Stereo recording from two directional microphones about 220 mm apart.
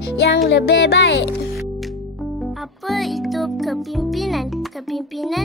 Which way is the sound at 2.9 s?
Centre (ahead or behind).